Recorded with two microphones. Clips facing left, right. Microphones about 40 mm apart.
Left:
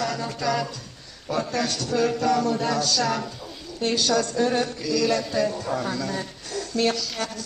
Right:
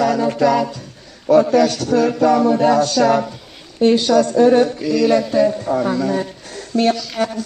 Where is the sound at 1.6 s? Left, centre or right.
Centre; by 5.2 s right.